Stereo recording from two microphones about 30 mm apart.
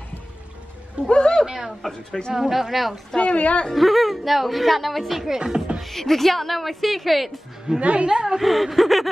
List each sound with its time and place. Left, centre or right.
1.0 s speech: left
1.4 s speech: centre
2.0 s speech: left
2.3 s speech: centre
3.2 s speech: left
3.7 s speech: centre
5.3 s speech: right
5.8 s speech: centre
7.8 s a woman's voice: right
8.1 s speech: right
8.4 s speech: centre